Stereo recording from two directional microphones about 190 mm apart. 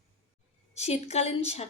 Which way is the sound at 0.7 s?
35° left (ahead or behind).